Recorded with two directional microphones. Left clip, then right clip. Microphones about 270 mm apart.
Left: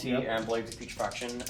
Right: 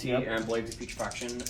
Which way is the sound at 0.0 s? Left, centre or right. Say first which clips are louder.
Right 1 dB; left.